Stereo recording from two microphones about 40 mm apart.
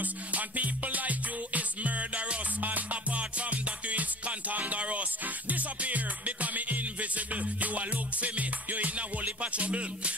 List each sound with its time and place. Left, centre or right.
0.0 s music: right